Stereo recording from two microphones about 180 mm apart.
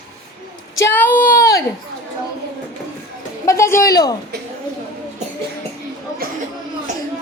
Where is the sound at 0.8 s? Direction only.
10° left (ahead or behind).